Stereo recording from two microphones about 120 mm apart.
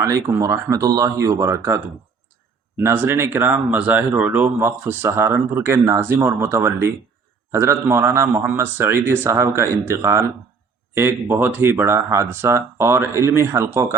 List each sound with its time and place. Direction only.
0.0 s speech: 25° right (ahead or behind)